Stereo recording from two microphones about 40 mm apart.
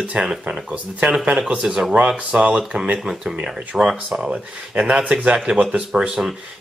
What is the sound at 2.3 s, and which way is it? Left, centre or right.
Speech, right.